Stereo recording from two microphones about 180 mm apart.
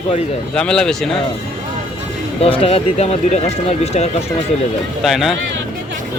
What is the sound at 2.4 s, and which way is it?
Speech, 35° left (ahead or behind).